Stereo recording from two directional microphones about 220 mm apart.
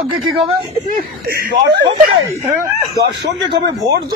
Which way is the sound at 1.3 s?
50° right (ahead or behind).